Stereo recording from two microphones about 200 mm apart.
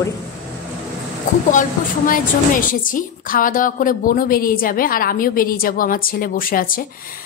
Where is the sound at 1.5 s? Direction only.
40° left (ahead or behind).